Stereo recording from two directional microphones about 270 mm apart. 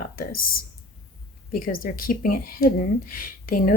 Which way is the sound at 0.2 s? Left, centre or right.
Left.